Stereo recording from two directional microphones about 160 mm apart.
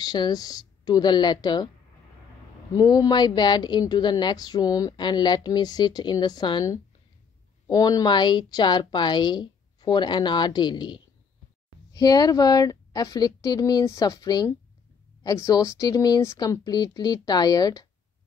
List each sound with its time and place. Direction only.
0.0 s a woman's voice: 25° left (ahead or behind)
2.7 s a woman's voice: 25° left (ahead or behind)